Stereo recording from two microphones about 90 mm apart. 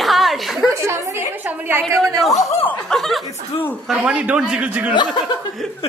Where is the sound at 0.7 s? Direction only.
30° right (ahead or behind).